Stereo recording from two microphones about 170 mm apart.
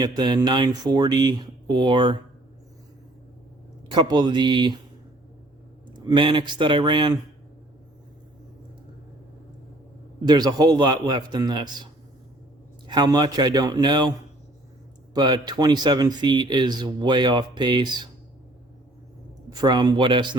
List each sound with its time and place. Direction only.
0.0 s speech: 25° right (ahead or behind)
3.8 s speech: 30° right (ahead or behind)
5.9 s speech: 30° right (ahead or behind)
10.2 s speech: 25° right (ahead or behind)
12.9 s speech: 25° right (ahead or behind)
15.1 s speech: 25° right (ahead or behind)
19.5 s speech: 25° right (ahead or behind)